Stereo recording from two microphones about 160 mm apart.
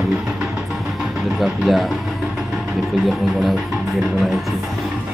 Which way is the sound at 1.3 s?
5° right (ahead or behind).